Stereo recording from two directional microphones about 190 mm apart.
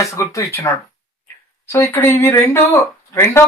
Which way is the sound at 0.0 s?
15° left (ahead or behind).